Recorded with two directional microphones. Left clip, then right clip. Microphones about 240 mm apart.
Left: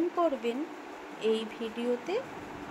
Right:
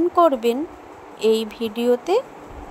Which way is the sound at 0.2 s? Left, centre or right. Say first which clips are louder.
Right 15 dB; right.